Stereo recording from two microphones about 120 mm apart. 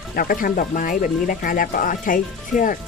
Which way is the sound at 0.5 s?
90° left.